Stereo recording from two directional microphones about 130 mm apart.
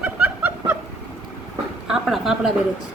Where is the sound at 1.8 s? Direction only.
5° right (ahead or behind).